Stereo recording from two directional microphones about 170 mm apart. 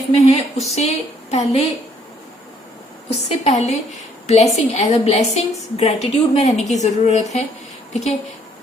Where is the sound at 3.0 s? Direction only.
40° left (ahead or behind).